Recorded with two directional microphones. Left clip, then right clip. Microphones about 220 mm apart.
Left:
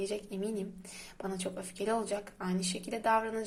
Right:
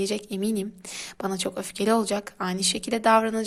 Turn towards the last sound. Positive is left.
turn(degrees=-30)  # may be behind; listen again after turning